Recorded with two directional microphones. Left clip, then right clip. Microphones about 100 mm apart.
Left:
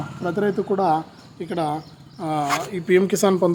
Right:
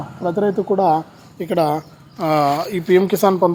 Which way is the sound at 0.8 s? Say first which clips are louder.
Right 5 dB; 45° right (ahead or behind).